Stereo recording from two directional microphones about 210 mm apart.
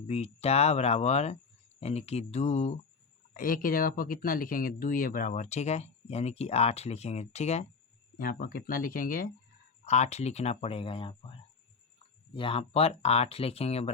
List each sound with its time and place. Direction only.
0.1 s speech: 30° left (ahead or behind)
8.2 s speech: 40° left (ahead or behind)